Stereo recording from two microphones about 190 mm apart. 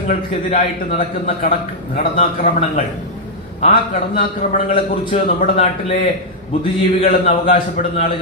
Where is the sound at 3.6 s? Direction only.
40° left (ahead or behind).